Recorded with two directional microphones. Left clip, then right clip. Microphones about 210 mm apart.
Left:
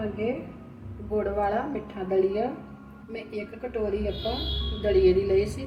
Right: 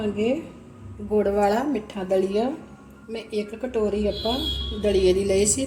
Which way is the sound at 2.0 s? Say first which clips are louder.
Right 3 dB; 50° right (ahead or behind).